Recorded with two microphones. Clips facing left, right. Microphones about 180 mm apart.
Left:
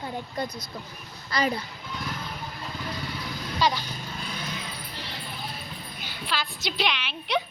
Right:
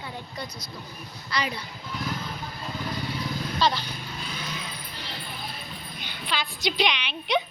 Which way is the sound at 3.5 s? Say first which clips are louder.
Even; 10° left (ahead or behind).